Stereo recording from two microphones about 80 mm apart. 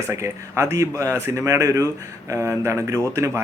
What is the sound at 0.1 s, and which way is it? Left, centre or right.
A man's voice, right.